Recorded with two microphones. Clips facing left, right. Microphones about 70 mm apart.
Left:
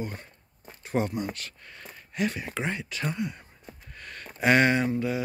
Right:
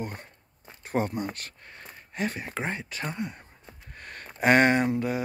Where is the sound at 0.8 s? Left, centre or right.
Right.